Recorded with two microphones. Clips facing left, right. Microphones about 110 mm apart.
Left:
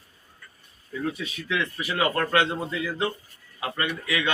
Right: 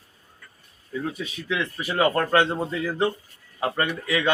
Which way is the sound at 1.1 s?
25° right (ahead or behind).